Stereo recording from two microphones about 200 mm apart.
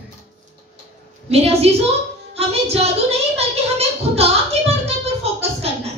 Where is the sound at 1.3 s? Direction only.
30° right (ahead or behind).